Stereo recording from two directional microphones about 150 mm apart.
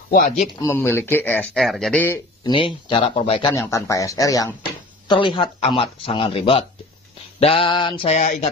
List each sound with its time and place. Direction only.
0.6 s speech: 20° left (ahead or behind)
2.4 s speech: 35° left (ahead or behind)
3.4 s speech: 20° left (ahead or behind)
5.0 s speech: 30° left (ahead or behind)
8.2 s speech: 55° left (ahead or behind)